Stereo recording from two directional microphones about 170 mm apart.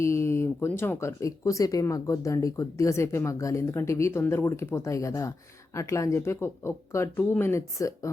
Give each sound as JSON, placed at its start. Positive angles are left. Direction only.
{"t": 0.0, "sound": "speech", "side_deg": 15}